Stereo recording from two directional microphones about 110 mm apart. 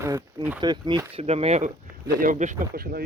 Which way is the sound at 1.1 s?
65° right (ahead or behind).